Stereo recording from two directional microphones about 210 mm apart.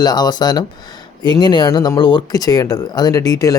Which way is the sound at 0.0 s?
20° left (ahead or behind).